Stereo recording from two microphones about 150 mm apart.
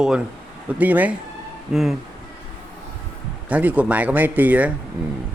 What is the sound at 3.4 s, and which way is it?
Speech, 10° right (ahead or behind).